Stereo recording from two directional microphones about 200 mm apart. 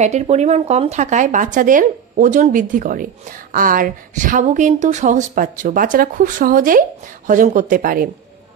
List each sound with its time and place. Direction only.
0.0 s speech: 35° right (ahead or behind)